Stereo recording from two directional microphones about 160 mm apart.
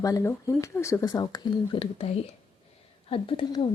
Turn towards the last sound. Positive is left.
turn(degrees=35)  # may be behind; listen again after turning